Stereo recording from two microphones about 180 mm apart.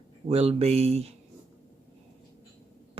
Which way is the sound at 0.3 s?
35° right (ahead or behind).